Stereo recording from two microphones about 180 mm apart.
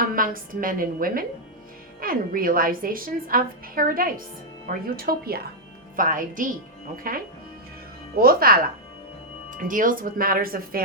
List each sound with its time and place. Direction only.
0.0 s a woman's voice: 50° right (ahead or behind)